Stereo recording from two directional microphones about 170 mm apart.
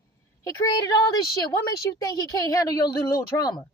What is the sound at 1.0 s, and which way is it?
A woman's voice, 20° left (ahead or behind).